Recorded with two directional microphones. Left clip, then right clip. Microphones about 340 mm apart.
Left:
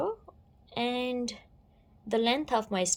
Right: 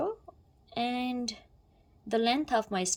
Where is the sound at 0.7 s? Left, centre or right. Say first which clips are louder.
Left 1 dB; centre.